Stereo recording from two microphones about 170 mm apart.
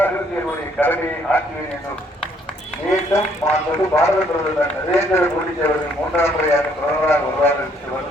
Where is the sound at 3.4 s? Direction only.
15° left (ahead or behind).